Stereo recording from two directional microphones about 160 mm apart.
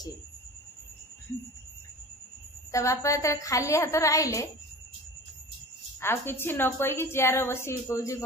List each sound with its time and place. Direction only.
2.7 s a woman's voice: 20° left (ahead or behind)
5.9 s a woman's voice: 15° left (ahead or behind)